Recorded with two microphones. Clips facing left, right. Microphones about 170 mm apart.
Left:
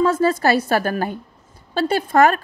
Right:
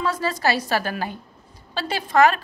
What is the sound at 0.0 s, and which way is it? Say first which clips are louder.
A woman's voice: left 7 dB; 50° left (ahead or behind).